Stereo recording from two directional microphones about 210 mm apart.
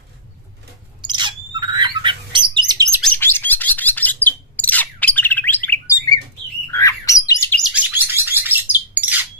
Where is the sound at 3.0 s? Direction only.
10° left (ahead or behind).